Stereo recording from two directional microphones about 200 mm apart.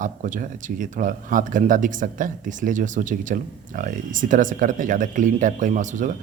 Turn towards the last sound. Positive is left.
turn(degrees=-40)  # may be behind; listen again after turning